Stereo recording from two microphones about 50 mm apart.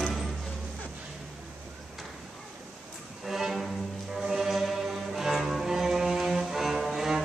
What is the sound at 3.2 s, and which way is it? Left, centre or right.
Music, centre.